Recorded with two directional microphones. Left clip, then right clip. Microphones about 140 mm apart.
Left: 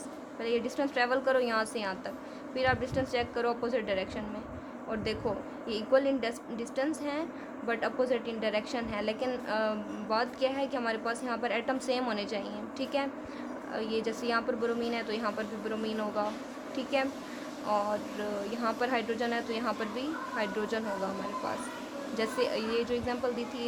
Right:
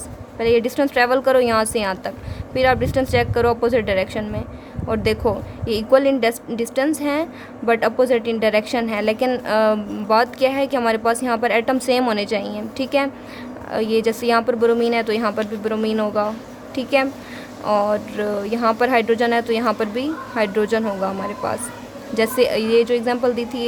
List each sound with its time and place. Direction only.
0.3 s a woman's voice: 55° right (ahead or behind)